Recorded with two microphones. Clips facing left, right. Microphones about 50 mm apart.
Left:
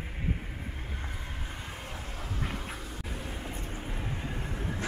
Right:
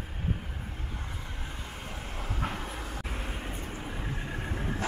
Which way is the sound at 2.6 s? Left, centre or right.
Right.